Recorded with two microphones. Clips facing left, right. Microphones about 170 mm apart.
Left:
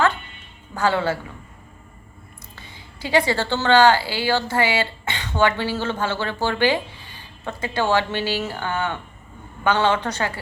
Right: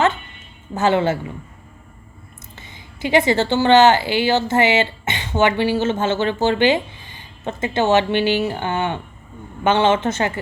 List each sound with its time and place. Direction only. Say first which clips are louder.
0.7 s a woman's voice: right 4 dB; 20° right (ahead or behind)
2.6 s a woman's voice: right 6 dB; 20° right (ahead or behind)